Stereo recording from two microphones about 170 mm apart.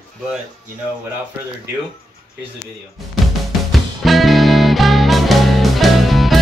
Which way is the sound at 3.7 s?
Centre (ahead or behind).